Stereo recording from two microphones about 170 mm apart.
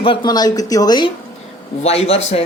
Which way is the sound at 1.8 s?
35° left (ahead or behind).